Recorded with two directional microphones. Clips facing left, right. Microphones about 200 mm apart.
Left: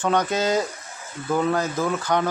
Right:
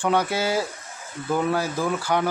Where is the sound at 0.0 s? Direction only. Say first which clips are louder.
Left 1 dB; 10° right (ahead or behind).